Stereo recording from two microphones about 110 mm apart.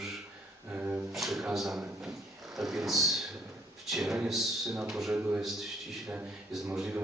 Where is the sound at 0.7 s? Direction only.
15° right (ahead or behind).